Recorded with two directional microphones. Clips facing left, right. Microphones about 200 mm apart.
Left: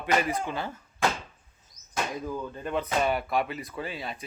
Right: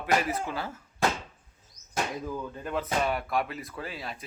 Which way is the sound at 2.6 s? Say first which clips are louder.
Left 2 dB; centre (ahead or behind).